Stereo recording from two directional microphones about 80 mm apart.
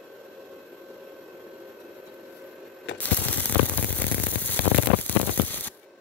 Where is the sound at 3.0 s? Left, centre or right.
Left.